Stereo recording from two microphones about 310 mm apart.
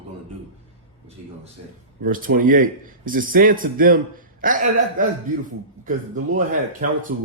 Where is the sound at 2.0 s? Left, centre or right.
Right.